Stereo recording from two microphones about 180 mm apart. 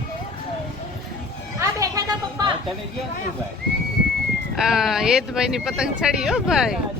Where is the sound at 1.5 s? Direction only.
20° right (ahead or behind).